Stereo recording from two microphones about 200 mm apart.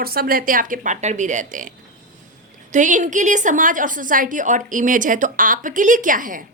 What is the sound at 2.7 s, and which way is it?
A woman's voice, 40° right (ahead or behind).